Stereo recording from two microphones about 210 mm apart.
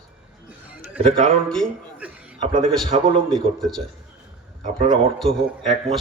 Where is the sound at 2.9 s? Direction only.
30° right (ahead or behind).